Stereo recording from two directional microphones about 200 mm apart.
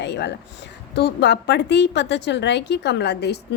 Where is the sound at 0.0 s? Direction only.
60° left (ahead or behind).